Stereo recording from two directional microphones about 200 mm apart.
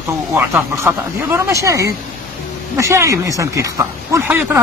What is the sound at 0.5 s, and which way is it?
Speech, 10° right (ahead or behind).